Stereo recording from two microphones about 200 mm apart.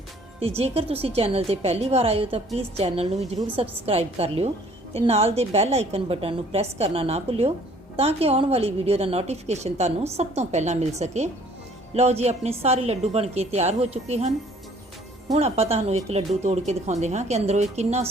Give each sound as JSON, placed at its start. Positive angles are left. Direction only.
{"t": 0.3, "sound": "a woman's voice", "side_deg": -30}
{"t": 15.4, "sound": "a woman's voice", "side_deg": -30}